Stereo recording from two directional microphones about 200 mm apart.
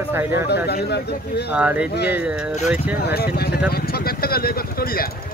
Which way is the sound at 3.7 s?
50° left (ahead or behind).